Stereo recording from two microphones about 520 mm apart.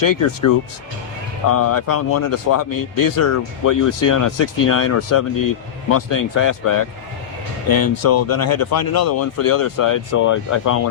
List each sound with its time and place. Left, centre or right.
0.0 s speech: left
1.5 s speech: left
2.6 s speech: left